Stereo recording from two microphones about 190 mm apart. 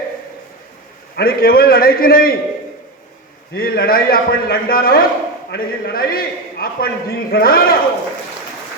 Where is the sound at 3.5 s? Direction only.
50° left (ahead or behind).